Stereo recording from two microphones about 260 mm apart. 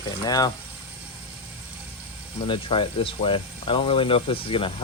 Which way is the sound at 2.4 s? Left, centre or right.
Centre.